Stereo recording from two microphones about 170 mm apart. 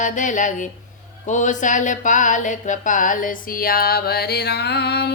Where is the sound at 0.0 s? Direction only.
50° left (ahead or behind).